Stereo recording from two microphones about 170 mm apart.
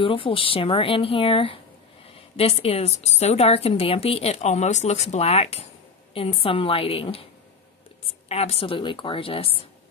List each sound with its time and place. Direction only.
0.0 s a woman's voice: 30° left (ahead or behind)
8.3 s a woman's voice: 35° left (ahead or behind)